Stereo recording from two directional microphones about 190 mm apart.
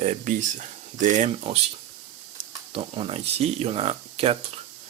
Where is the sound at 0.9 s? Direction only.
40° right (ahead or behind).